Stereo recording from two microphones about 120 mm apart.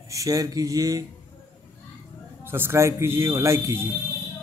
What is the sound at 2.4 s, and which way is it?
A man's voice, 20° right (ahead or behind).